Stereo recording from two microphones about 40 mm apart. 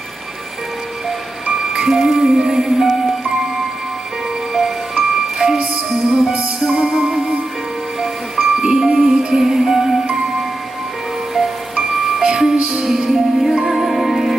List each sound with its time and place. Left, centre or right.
1.5 s music: centre
4.5 s music: centre
6.8 s music: right
8.0 s music: centre
8.7 s music: centre
11.3 s music: centre
12.2 s music: centre
12.5 s music: right
12.8 s music: centre